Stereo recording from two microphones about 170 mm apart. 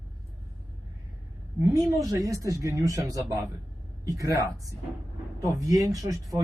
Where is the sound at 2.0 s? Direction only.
20° right (ahead or behind).